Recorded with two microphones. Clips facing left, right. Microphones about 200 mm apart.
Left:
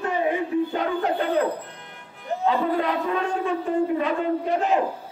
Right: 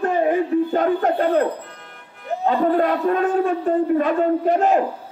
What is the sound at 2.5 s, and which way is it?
A man's voice, 50° right (ahead or behind).